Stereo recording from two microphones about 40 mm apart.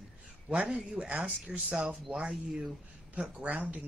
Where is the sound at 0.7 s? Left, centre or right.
Right.